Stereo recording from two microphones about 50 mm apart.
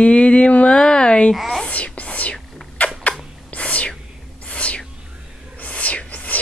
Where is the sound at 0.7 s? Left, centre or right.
Centre.